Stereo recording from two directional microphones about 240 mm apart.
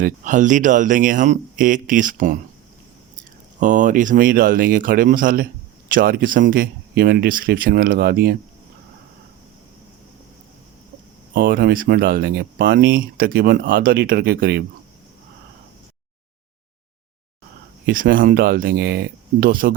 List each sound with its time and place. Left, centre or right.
0.0 s speech: right
3.6 s speech: right
11.3 s speech: right
17.8 s speech: right